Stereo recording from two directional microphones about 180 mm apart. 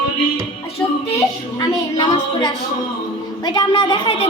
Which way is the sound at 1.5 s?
25° left (ahead or behind).